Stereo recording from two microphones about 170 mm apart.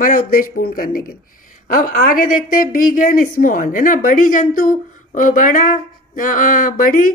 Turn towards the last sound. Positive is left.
turn(degrees=55)  # may be behind; listen again after turning